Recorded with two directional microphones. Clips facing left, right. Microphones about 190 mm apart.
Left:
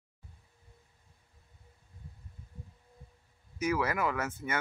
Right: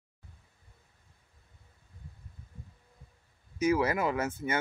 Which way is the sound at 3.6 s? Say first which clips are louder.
Right 3 dB; 25° right (ahead or behind).